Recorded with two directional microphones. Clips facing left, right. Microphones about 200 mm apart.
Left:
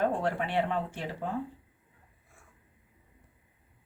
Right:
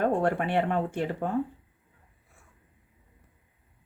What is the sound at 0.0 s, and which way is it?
Speech, 55° right (ahead or behind).